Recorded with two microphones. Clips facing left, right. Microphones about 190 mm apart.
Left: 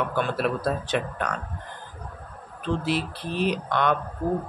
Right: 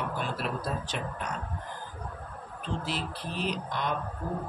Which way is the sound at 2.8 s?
70° left (ahead or behind).